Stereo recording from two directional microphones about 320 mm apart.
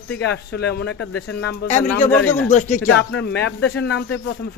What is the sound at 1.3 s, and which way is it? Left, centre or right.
Speech, left.